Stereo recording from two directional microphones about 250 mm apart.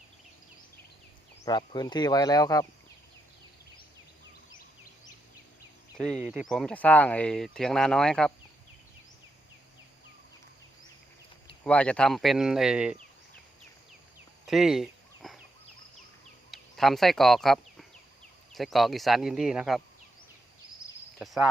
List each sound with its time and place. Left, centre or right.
1.5 s speech: centre
6.0 s speech: centre
11.6 s speech: centre
14.4 s fowl: centre
16.5 s speech: centre